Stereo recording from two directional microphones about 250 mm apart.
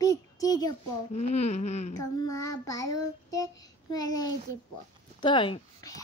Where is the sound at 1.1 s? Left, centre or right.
Left.